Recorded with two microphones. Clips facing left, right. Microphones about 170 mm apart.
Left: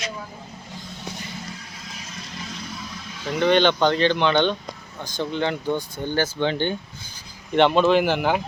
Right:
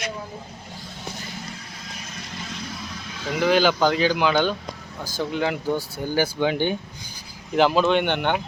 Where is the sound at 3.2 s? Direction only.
5° right (ahead or behind).